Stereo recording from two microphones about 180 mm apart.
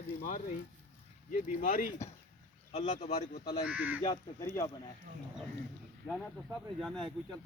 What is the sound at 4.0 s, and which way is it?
Speech, 25° left (ahead or behind).